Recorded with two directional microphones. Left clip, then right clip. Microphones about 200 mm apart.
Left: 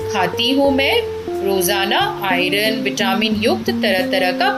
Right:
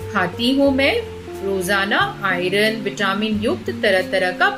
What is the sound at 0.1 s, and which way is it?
A woman's voice, 15° right (ahead or behind).